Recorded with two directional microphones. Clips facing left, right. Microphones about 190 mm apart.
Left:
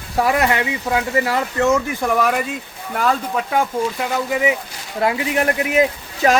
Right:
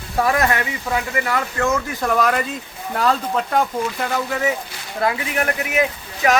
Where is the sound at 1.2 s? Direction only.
25° left (ahead or behind).